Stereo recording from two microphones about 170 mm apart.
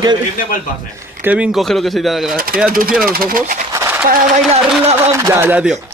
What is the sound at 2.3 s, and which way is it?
Speech, 60° right (ahead or behind).